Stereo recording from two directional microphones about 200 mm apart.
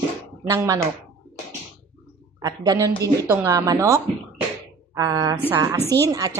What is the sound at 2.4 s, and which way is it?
A woman's voice, 20° right (ahead or behind).